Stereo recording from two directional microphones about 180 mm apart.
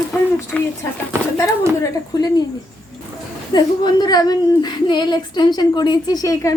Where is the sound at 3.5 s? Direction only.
25° left (ahead or behind).